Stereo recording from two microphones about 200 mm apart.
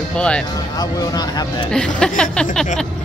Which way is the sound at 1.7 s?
5° left (ahead or behind).